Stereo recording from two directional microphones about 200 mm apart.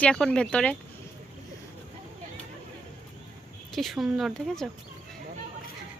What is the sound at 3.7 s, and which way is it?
Speech, centre (ahead or behind).